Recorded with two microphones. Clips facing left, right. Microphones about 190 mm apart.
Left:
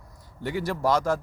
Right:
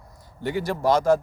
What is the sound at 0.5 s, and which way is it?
Speech, 25° right (ahead or behind).